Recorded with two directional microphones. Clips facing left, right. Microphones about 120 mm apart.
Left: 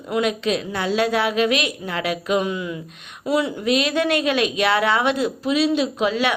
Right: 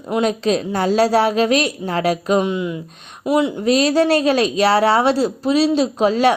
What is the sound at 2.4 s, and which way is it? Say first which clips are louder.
Speech: right 4 dB; 25° right (ahead or behind).